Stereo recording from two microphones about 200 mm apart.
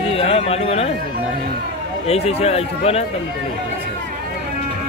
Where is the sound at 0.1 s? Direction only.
30° left (ahead or behind).